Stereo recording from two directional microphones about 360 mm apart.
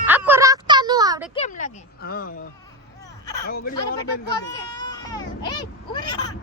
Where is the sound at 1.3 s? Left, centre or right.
Centre.